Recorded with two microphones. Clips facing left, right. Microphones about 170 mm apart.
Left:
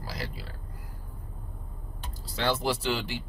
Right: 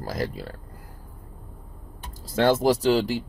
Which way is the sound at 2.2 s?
45° right (ahead or behind).